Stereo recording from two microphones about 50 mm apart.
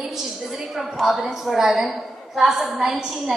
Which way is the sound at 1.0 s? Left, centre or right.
Centre.